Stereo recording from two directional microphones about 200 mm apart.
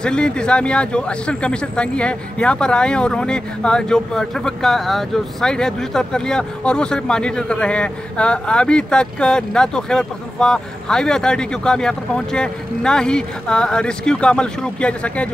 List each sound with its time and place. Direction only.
0.0 s speech: 5° left (ahead or behind)